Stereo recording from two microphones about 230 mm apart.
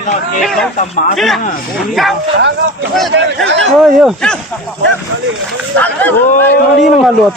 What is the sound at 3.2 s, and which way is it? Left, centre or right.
Speech, right.